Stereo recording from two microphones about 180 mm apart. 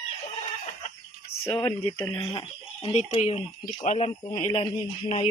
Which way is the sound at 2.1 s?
25° left (ahead or behind).